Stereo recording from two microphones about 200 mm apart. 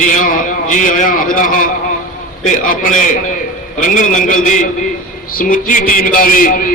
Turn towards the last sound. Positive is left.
turn(degrees=45)  # may be behind; listen again after turning